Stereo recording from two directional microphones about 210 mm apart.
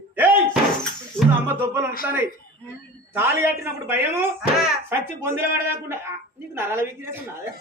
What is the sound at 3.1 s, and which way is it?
Speech, 10° right (ahead or behind).